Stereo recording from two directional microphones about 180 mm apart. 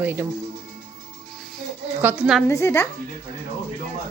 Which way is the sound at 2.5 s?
15° left (ahead or behind).